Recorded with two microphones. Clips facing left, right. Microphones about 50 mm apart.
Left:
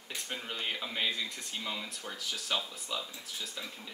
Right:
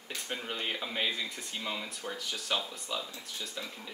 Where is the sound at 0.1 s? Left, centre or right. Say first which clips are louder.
Right 2 dB; centre.